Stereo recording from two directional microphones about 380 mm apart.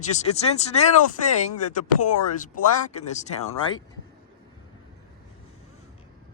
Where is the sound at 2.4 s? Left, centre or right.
Centre.